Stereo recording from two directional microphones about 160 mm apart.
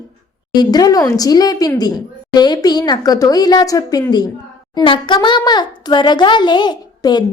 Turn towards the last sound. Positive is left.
turn(degrees=25)  # may be behind; listen again after turning